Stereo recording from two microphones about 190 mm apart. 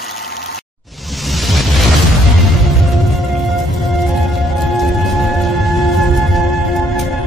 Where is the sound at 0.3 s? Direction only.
60° left (ahead or behind).